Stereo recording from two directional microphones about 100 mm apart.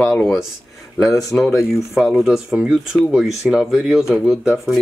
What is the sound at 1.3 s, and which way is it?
Speech, centre (ahead or behind).